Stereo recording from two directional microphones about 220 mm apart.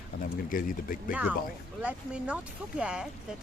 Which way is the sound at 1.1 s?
5° right (ahead or behind).